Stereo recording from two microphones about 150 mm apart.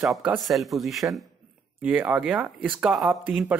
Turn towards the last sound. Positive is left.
turn(degrees=0)  # may be behind; listen again after turning